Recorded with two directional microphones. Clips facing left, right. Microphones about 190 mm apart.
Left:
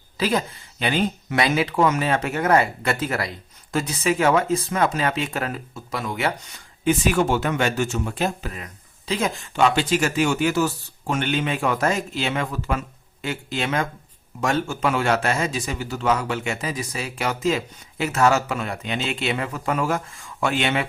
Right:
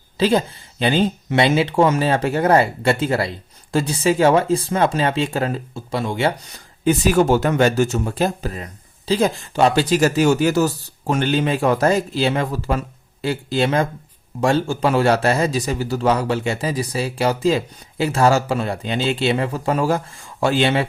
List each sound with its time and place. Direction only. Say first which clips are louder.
0.2 s a man's voice: right 5 dB; 30° right (ahead or behind)